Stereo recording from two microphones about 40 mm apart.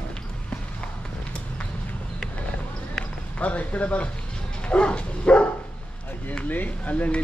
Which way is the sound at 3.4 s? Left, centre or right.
Left.